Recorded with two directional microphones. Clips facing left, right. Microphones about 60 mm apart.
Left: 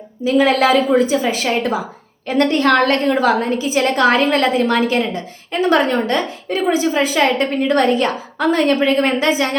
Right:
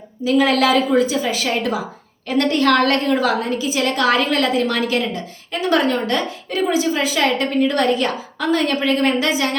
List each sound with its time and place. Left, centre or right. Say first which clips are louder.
0.3 s a woman's voice: left 2 dB; left